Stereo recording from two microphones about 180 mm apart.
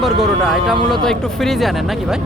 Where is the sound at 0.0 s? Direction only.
Centre (ahead or behind).